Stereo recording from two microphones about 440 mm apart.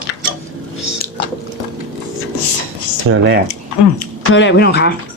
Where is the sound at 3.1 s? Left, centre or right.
Right.